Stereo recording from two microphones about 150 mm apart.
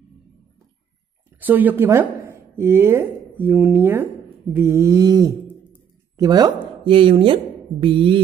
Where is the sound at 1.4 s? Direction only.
10° right (ahead or behind).